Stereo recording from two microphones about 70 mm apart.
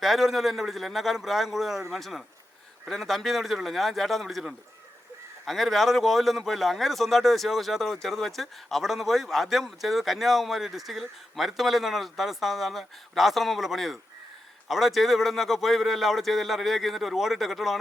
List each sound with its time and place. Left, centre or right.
0.0 s a man's voice: centre